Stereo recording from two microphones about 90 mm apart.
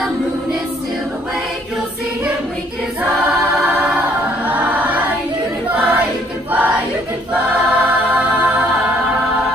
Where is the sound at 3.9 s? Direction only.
15° right (ahead or behind).